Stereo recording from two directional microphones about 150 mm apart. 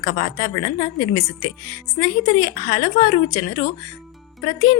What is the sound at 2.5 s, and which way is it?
Speech, 60° left (ahead or behind).